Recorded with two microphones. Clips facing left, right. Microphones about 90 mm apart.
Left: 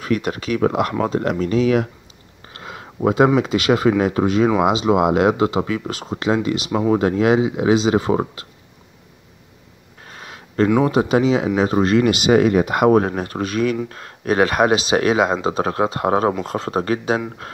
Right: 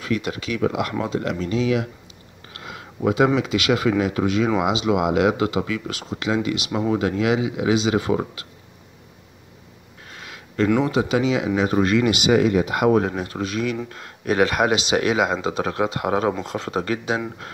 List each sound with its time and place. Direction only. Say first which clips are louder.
0.0 s speech: left 4 dB; 45° left (ahead or behind)
2.5 s a sound: left 2 dB; 35° left (ahead or behind)
3.3 s speech: left 4 dB; 40° left (ahead or behind)
10.1 s a sound: left 4 dB; 35° left (ahead or behind)
10.9 s speech: left 4 dB; 40° left (ahead or behind)
14.2 s speech: left 3 dB; 45° left (ahead or behind)